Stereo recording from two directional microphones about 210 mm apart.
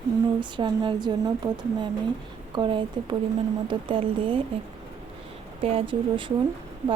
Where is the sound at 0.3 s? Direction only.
20° right (ahead or behind).